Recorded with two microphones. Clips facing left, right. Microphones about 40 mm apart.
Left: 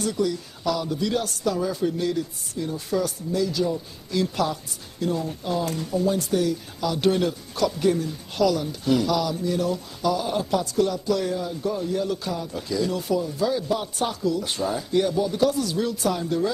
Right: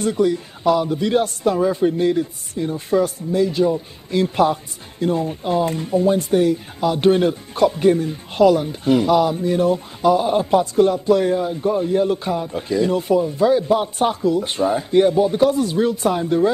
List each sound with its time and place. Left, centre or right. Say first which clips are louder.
0.0 s speech: right 7 dB; right